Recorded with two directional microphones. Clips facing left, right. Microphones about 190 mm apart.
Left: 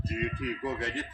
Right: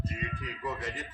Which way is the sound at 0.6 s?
65° left (ahead or behind).